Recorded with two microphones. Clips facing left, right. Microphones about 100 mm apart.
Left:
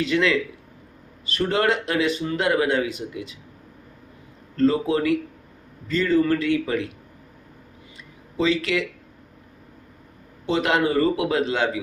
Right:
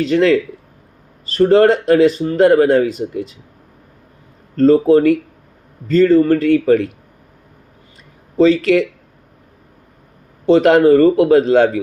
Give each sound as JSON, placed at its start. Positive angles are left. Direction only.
{"t": 0.0, "sound": "speech", "side_deg": -40}
{"t": 4.5, "sound": "a man's voice", "side_deg": -40}
{"t": 8.4, "sound": "speech", "side_deg": -40}
{"t": 10.4, "sound": "a man's voice", "side_deg": -45}